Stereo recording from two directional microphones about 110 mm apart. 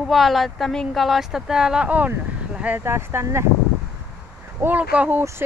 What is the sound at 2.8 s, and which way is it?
Speech, 25° right (ahead or behind).